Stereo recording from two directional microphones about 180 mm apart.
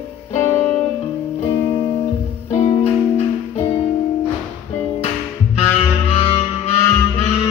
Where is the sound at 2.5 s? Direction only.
35° left (ahead or behind).